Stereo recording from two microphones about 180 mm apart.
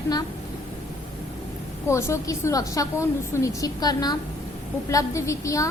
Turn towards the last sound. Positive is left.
turn(degrees=15)  # may be behind; listen again after turning